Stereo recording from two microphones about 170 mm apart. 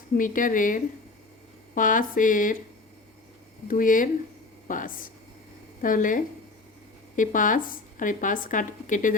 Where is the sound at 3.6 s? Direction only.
50° left (ahead or behind).